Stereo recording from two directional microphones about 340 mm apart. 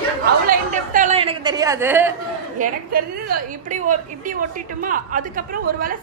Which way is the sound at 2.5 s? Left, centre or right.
Right.